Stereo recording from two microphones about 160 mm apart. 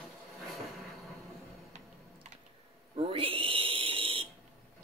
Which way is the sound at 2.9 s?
35° right (ahead or behind).